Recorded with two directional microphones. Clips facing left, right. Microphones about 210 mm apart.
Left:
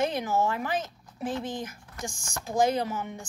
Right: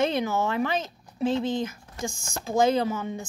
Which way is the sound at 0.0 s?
25° right (ahead or behind).